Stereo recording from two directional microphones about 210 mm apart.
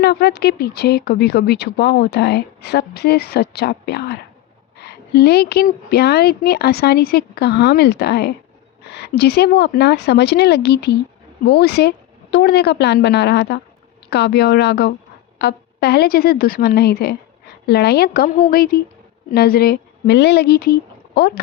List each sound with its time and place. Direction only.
0.0 s speech: 50° left (ahead or behind)